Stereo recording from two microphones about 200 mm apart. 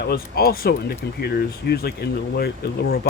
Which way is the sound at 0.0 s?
50° left (ahead or behind).